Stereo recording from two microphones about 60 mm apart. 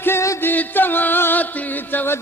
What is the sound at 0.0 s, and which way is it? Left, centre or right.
Music, left.